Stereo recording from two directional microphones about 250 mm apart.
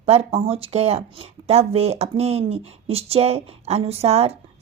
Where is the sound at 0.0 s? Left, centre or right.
Right.